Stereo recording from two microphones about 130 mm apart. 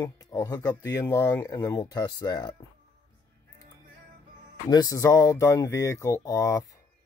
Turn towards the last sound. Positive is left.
turn(degrees=25)  # may be behind; listen again after turning